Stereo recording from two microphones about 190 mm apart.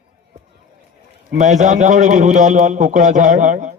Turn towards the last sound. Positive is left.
turn(degrees=-40)  # may be behind; listen again after turning